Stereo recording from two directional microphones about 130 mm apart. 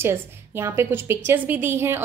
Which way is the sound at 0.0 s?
20° right (ahead or behind).